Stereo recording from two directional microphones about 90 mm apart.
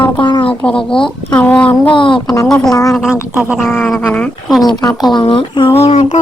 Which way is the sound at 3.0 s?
5° right (ahead or behind).